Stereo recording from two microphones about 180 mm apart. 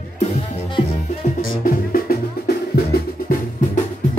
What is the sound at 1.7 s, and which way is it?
Music, 55° left (ahead or behind).